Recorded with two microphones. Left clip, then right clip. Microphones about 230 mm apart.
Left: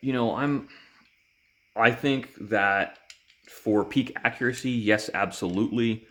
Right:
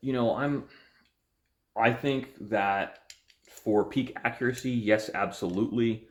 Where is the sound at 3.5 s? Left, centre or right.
Left.